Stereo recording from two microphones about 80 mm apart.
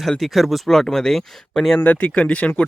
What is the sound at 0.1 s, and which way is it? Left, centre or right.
Speech, centre.